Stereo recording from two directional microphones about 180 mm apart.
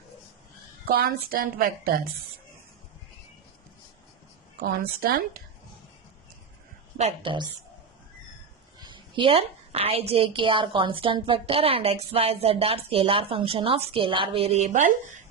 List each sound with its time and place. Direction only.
0.9 s a woman's voice: 55° right (ahead or behind)
4.6 s a woman's voice: 55° right (ahead or behind)
6.9 s a woman's voice: 35° right (ahead or behind)
8.8 s a woman's voice: 25° right (ahead or behind); by 15.2 s 45° right (ahead or behind)